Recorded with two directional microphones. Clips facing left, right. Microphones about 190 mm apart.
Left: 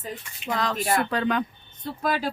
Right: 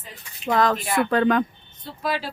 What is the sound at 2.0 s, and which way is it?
Speech, 45° left (ahead or behind).